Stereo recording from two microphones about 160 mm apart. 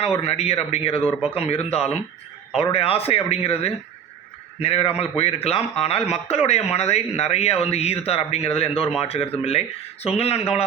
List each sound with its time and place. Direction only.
0.0 s speech: 40° left (ahead or behind)